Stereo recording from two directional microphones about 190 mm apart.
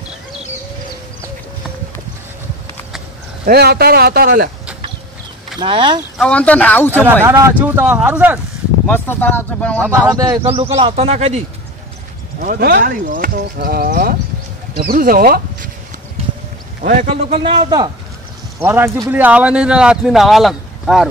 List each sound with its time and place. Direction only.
3.4 s speech: 55° right (ahead or behind)
5.6 s a man's voice: 25° right (ahead or behind)
6.1 s speech: 5° left (ahead or behind)
7.2 s speech: 15° right (ahead or behind)
8.8 s speech: 10° left (ahead or behind)
9.8 s speech: 15° right (ahead or behind)
10.4 s speech: 30° right (ahead or behind)
12.4 s speech: 50° right (ahead or behind)
16.8 s speech: 45° right (ahead or behind)
17.4 s a man's voice: 25° right (ahead or behind)
18.6 s speech: 15° right (ahead or behind)